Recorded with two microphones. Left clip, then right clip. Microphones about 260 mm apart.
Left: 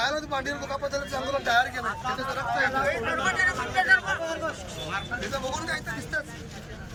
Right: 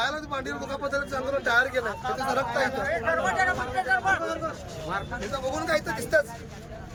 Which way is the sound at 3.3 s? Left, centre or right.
Right.